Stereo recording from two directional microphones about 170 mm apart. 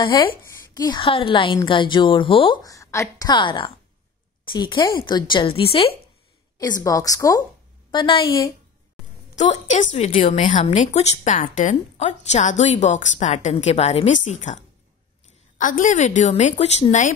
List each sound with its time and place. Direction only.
0.0 s a woman's voice: 30° left (ahead or behind)
6.6 s a woman's voice: 20° left (ahead or behind)
9.3 s a woman's voice: 45° left (ahead or behind)